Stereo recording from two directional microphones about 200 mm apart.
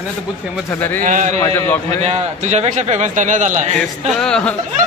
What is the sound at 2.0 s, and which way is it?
A man's voice, 35° right (ahead or behind).